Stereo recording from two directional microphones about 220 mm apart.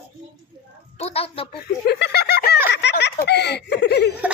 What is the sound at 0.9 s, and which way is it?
Speech, 25° left (ahead or behind).